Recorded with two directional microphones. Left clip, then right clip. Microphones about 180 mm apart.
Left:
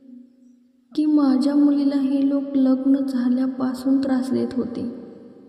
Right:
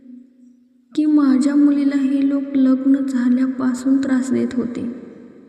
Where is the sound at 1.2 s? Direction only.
20° right (ahead or behind).